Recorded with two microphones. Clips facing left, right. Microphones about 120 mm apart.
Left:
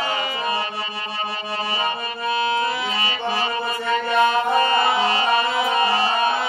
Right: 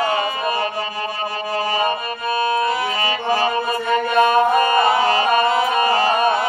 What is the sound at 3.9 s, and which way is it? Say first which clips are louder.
Mantra: right 3 dB; 45° right (ahead or behind).